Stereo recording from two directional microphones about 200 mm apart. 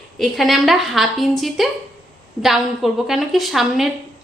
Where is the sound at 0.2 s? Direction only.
Centre (ahead or behind).